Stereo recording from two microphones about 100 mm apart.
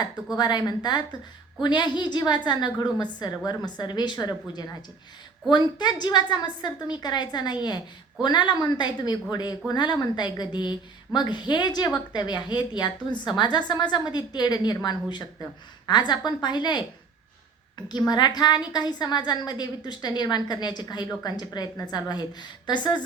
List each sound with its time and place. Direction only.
0.3 s a woman's voice: 45° left (ahead or behind)
15.9 s a woman's voice: 45° left (ahead or behind)
17.8 s a woman's voice: 45° left (ahead or behind)